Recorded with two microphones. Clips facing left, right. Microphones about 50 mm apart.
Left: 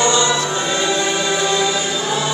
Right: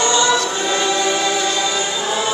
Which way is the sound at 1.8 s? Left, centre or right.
Centre.